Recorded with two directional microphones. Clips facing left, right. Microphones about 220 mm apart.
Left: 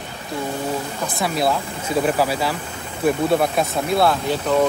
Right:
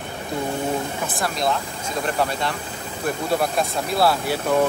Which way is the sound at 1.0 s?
Centre (ahead or behind).